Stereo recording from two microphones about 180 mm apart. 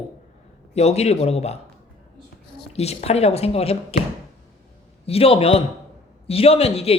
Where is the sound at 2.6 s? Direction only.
35° left (ahead or behind).